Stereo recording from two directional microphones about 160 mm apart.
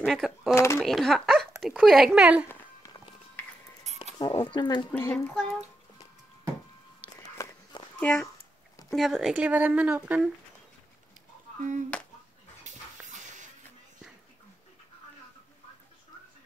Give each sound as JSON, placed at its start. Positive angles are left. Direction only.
{"t": 0.0, "sound": "speech", "side_deg": 0}
{"t": 0.6, "sound": "speech", "side_deg": 20}
{"t": 0.8, "sound": "speech", "side_deg": 0}
{"t": 2.4, "sound": "music", "side_deg": 20}
{"t": 4.2, "sound": "speech", "side_deg": 30}
{"t": 4.9, "sound": "speech", "side_deg": 15}
{"t": 7.2, "sound": "walk", "side_deg": 20}
{"t": 8.0, "sound": "speech", "side_deg": 5}
{"t": 11.9, "sound": "a sound", "side_deg": 10}
{"t": 12.6, "sound": "dog", "side_deg": -50}